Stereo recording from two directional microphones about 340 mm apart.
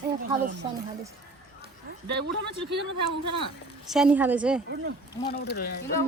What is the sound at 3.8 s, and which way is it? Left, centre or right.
Speech, centre.